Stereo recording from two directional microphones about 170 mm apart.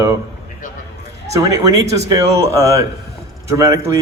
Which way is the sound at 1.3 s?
20° right (ahead or behind).